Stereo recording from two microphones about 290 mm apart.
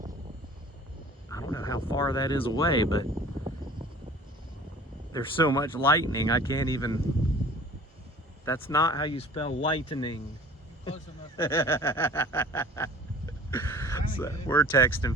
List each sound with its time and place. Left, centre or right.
1.3 s speech: centre
5.1 s speech: centre
8.4 s speech: centre
11.3 s snicker: centre